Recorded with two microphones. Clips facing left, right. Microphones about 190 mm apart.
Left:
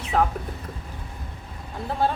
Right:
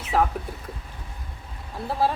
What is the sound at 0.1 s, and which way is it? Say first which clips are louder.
Speech: even; 5° right (ahead or behind).